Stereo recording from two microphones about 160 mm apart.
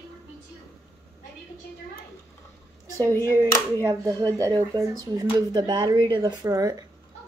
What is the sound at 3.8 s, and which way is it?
Speech, 20° right (ahead or behind).